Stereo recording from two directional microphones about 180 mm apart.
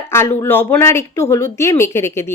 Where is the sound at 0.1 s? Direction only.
15° left (ahead or behind).